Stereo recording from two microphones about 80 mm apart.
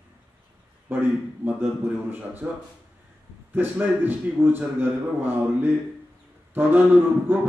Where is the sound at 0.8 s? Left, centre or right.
Right.